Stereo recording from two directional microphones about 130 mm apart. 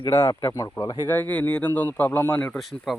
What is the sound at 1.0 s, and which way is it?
Speech, 15° left (ahead or behind).